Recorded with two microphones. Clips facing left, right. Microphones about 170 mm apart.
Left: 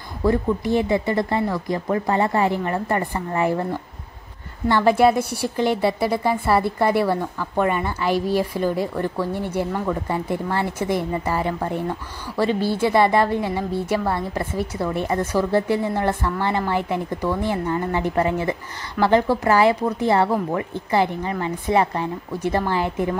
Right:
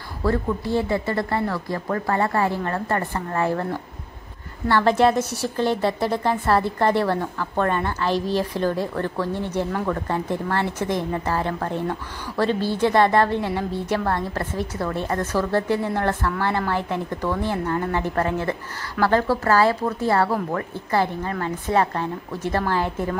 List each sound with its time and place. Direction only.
0.2 s a woman's voice: 15° left (ahead or behind)